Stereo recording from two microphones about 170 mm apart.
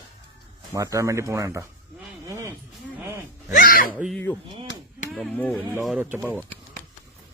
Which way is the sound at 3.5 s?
55° left (ahead or behind).